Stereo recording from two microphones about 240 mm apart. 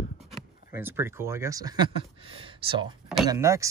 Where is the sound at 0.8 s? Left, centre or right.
Centre.